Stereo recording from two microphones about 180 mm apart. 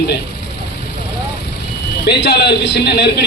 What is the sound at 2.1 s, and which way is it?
A man's voice, 65° left (ahead or behind).